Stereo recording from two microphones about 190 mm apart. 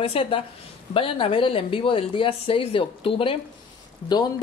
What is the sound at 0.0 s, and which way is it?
Speech, 30° left (ahead or behind).